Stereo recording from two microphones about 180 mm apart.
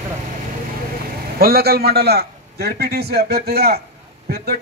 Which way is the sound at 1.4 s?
60° right (ahead or behind).